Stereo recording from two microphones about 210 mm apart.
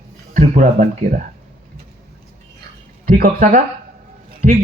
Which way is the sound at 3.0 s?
40° right (ahead or behind).